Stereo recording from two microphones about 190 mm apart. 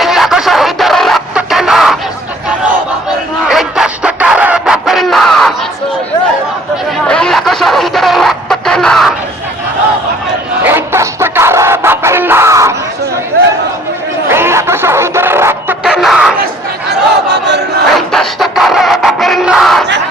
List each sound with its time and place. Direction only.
0.0 s music: centre (ahead or behind)
3.5 s a sound: centre (ahead or behind)
7.1 s snicker: 5° left (ahead or behind)
10.6 s music: 10° right (ahead or behind)
14.3 s snicker: 10° right (ahead or behind)
15.8 s music: centre (ahead or behind)
17.3 s battle cry: 65° right (ahead or behind)
17.9 s music: centre (ahead or behind)